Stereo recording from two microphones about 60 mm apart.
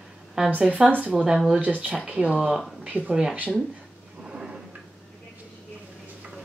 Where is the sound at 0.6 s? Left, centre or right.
Centre.